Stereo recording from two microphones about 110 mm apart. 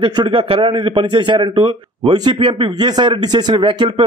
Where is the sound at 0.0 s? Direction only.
45° right (ahead or behind).